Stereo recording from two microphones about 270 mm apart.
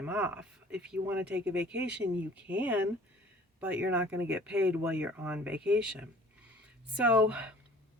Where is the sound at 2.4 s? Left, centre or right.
Centre.